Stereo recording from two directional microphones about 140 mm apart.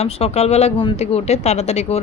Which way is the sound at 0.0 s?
50° left (ahead or behind).